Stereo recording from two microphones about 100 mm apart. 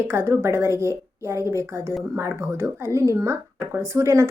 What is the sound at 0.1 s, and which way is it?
Speech, 25° right (ahead or behind).